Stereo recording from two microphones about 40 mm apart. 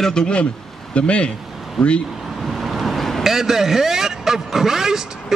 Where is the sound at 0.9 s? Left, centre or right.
Left.